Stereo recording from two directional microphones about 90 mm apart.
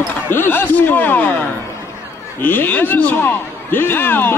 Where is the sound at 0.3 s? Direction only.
25° left (ahead or behind).